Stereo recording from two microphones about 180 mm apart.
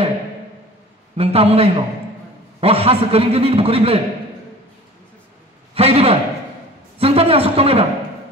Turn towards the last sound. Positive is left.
turn(degrees=-35)  # may be behind; listen again after turning